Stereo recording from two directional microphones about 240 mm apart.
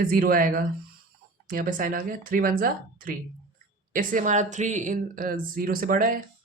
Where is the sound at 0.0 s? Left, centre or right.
Right.